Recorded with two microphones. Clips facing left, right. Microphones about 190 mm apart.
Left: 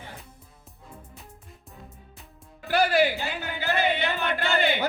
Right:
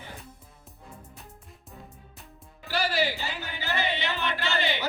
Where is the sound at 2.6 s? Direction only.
55° left (ahead or behind).